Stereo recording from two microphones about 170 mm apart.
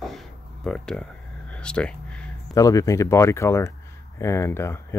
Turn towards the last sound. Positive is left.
turn(degrees=15)  # may be behind; listen again after turning